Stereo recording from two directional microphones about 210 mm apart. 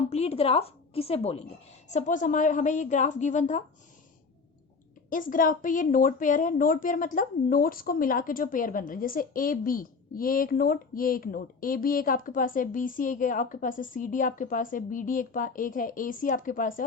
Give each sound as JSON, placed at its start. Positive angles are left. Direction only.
{"t": 0.1, "sound": "a woman's voice", "side_deg": 30}
{"t": 5.0, "sound": "a woman's voice", "side_deg": 40}